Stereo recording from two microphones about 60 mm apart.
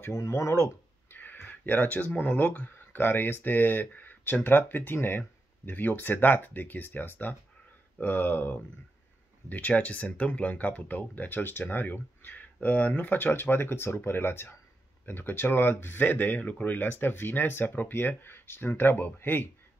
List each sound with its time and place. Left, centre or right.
0.0 s speech: left
1.1 s speech: left